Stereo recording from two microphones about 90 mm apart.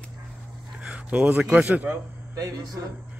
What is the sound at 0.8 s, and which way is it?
Speech, 15° right (ahead or behind).